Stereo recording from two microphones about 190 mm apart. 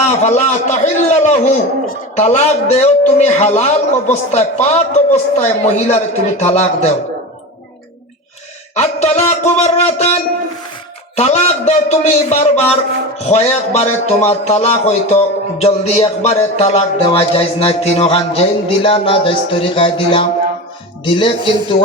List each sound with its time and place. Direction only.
0.0 s a man's voice: 35° left (ahead or behind)
8.7 s a man's voice: 35° left (ahead or behind)
11.2 s a man's voice: 35° left (ahead or behind)